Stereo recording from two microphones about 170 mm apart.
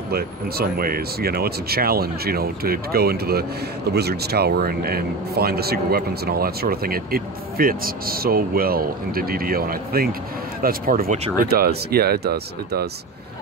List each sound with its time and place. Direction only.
0.1 s speech: 65° right (ahead or behind)